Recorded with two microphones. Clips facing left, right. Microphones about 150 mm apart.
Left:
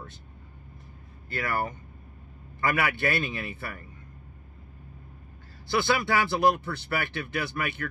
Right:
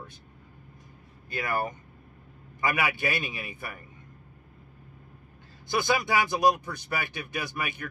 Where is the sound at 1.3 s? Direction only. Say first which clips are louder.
Even; 15° right (ahead or behind).